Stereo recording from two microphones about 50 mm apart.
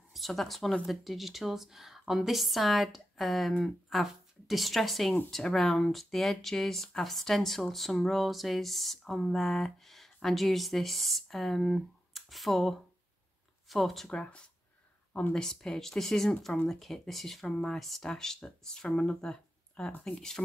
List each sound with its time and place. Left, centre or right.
0.1 s a woman's voice: centre
14.1 s a woman's voice: centre